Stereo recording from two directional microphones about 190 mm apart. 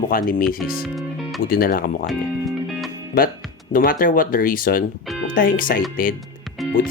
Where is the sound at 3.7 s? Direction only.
45° left (ahead or behind).